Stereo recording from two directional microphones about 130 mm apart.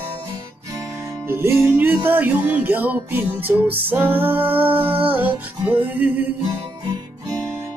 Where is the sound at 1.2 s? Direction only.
20° right (ahead or behind).